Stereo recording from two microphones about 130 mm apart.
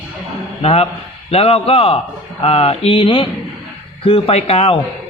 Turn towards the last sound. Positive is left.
turn(degrees=50)  # may be behind; listen again after turning